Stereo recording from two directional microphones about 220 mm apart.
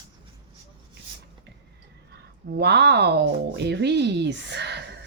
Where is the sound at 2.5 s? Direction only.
50° right (ahead or behind).